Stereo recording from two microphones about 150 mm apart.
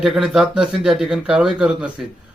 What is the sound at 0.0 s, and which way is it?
Speech, centre (ahead or behind).